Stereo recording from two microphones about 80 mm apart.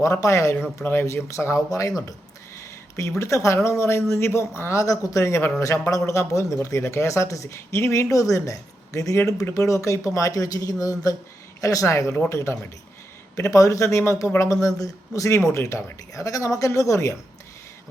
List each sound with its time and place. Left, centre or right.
0.0 s speech: left